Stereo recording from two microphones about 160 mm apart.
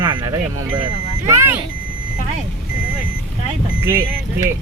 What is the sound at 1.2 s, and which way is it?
Speech, 15° right (ahead or behind).